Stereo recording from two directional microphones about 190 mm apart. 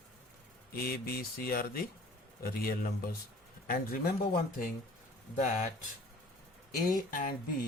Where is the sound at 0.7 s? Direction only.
50° left (ahead or behind).